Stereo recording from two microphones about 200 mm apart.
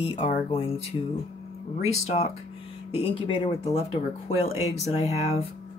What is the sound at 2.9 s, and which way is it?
Speech, 25° left (ahead or behind).